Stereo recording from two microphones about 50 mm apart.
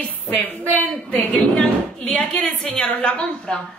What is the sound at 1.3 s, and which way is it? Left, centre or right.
A woman's voice, centre.